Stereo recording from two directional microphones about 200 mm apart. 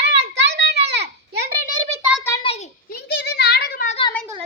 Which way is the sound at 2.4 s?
30° left (ahead or behind).